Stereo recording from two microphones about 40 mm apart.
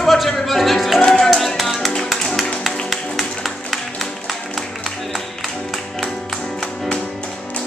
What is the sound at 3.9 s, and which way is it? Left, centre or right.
Music, centre.